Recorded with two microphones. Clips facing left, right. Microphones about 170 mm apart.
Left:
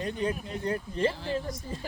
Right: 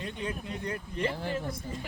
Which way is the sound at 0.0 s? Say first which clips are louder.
Left 5 dB; 35° left (ahead or behind).